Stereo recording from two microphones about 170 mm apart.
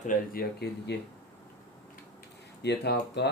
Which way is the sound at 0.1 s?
70° left (ahead or behind).